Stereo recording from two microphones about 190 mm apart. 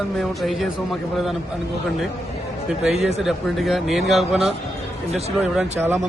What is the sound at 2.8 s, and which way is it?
Speech, centre (ahead or behind).